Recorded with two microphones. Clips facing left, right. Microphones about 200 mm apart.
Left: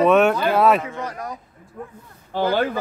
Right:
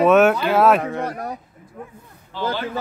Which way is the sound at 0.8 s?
60° right (ahead or behind).